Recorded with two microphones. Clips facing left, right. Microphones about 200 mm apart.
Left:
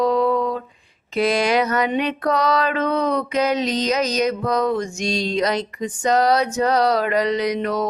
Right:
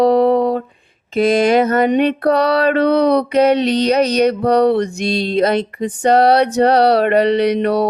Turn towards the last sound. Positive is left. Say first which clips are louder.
# right 7 dB
turn(degrees=-65)  # may be behind; listen again after turning